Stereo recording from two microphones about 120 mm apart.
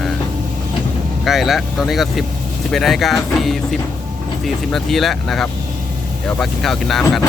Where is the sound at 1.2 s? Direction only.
Centre (ahead or behind).